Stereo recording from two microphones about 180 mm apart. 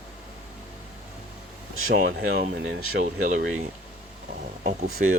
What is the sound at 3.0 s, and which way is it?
Speech, 45° right (ahead or behind).